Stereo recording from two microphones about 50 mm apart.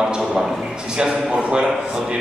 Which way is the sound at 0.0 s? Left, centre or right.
Centre.